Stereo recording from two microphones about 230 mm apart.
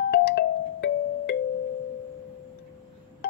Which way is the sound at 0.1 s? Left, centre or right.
Left.